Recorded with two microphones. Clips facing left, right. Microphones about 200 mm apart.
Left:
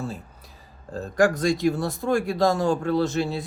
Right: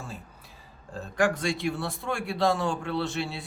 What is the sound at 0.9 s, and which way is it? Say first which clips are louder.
Speech: left 5 dB; 40° left (ahead or behind).